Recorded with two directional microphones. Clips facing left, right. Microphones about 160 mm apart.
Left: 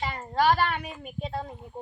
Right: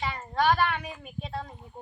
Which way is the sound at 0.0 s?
30° left (ahead or behind).